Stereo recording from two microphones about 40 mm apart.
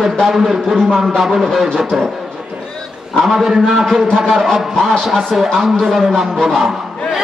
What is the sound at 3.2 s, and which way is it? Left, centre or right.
A man's voice, centre.